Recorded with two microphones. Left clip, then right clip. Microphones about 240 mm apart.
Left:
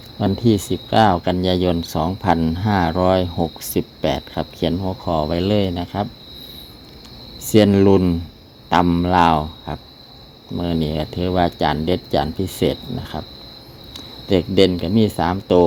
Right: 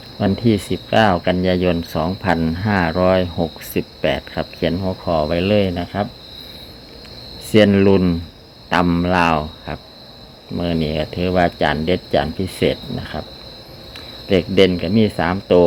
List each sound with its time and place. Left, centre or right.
0.2 s speech: left
7.5 s speech: left
14.3 s speech: left